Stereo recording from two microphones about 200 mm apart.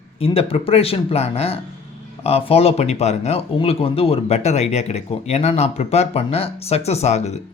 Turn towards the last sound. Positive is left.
turn(degrees=35)  # may be behind; listen again after turning